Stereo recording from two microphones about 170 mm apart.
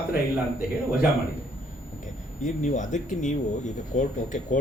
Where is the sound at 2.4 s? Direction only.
45° left (ahead or behind).